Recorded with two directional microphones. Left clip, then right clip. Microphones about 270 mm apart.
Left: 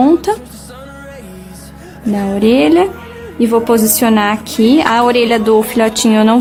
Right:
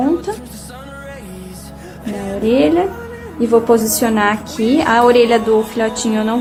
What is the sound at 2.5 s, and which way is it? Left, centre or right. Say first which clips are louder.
Speech: left 3 dB; left.